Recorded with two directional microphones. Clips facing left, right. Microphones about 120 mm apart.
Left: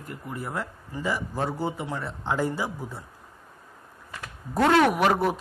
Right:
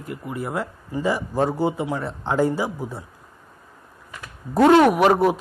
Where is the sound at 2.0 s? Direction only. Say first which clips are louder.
Right 5 dB; 30° right (ahead or behind).